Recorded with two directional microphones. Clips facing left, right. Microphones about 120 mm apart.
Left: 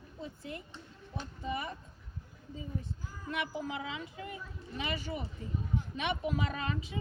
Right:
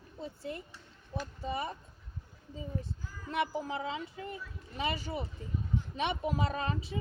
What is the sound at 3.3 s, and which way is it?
A woman's voice, 35° right (ahead or behind).